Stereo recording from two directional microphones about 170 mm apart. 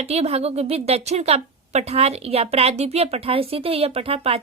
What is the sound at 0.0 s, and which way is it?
A woman's voice, 40° right (ahead or behind).